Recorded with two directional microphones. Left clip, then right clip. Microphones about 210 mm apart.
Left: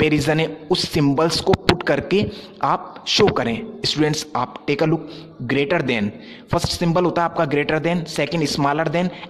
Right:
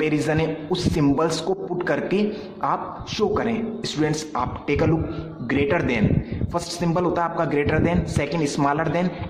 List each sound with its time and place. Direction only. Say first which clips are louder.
0.0 s a man's voice: left 4 dB; 40° left (ahead or behind)